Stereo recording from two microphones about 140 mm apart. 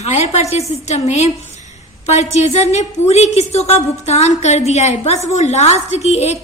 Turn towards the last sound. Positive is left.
turn(degrees=50)  # may be behind; listen again after turning